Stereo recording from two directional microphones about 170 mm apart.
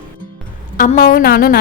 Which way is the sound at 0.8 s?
55° left (ahead or behind).